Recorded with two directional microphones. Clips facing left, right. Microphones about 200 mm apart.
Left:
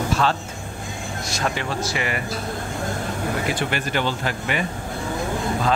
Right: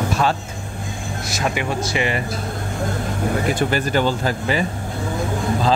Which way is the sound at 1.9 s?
25° right (ahead or behind).